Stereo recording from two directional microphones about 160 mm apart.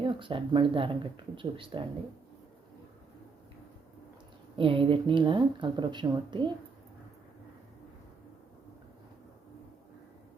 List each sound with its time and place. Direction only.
0.0 s speech: 30° right (ahead or behind)
4.5 s speech: 35° right (ahead or behind)